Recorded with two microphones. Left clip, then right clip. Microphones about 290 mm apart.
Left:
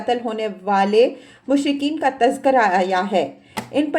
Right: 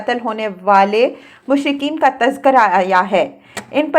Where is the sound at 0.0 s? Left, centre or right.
Centre.